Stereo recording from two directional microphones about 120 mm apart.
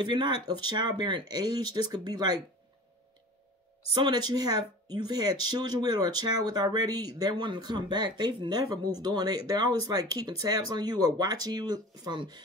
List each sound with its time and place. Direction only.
0.0 s speech: 40° right (ahead or behind)
3.9 s speech: 35° right (ahead or behind)